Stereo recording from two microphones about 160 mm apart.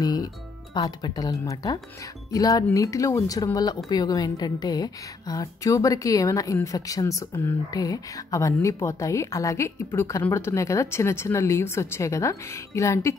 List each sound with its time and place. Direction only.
0.0 s music: 25° left (ahead or behind)
0.7 s speech: 25° left (ahead or behind)